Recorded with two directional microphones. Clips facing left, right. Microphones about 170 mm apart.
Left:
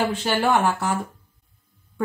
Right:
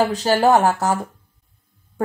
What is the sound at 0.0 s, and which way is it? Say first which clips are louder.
Speech: right 5 dB; 40° right (ahead or behind).